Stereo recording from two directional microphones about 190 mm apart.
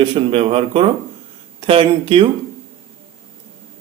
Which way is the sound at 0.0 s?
30° right (ahead or behind).